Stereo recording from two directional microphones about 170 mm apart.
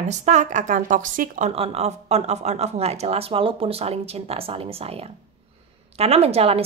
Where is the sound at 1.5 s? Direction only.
35° right (ahead or behind).